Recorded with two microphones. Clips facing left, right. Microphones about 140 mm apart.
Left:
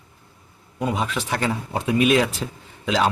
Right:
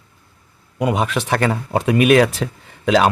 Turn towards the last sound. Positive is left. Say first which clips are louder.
# right 6 dB
turn(degrees=-70)  # may be behind; listen again after turning